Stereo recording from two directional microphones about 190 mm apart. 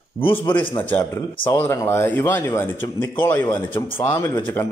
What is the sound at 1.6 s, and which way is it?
A man's voice, 15° left (ahead or behind).